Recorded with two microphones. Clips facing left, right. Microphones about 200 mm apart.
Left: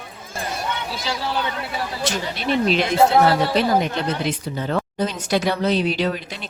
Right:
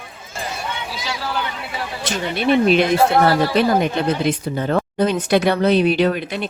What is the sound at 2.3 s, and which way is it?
Speech, 55° right (ahead or behind).